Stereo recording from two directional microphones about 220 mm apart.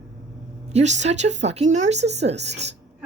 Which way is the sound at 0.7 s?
30° right (ahead or behind).